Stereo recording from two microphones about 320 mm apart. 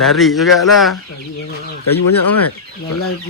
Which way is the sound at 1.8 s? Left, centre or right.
Left.